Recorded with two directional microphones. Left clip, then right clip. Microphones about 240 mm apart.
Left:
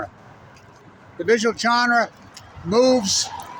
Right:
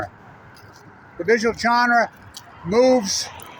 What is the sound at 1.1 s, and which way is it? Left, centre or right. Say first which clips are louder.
Speech: even; centre.